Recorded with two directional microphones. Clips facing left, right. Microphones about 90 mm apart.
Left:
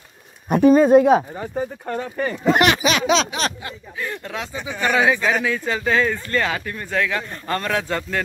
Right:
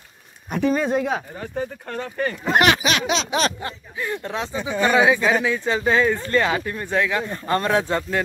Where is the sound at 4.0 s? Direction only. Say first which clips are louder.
Right 2 dB; 20° right (ahead or behind).